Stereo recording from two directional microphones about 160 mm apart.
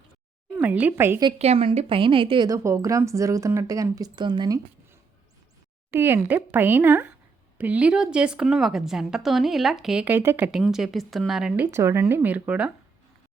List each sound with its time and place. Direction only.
0.5 s speech: 10° right (ahead or behind)
1.4 s a woman's voice: 40° right (ahead or behind)
5.9 s a woman's voice: 15° right (ahead or behind)